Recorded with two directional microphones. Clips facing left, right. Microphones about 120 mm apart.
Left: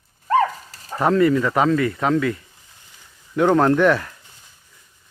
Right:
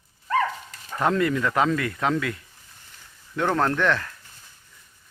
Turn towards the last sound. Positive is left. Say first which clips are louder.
# left 7 dB
turn(degrees=10)  # may be behind; listen again after turning